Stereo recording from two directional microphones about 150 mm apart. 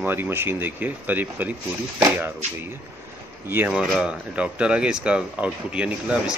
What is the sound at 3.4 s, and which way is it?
Speech, 15° right (ahead or behind).